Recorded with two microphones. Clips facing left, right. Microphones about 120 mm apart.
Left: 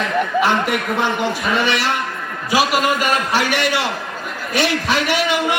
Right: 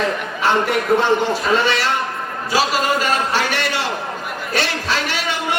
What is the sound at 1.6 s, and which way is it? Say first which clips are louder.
A man's voice: even; 15° left (ahead or behind).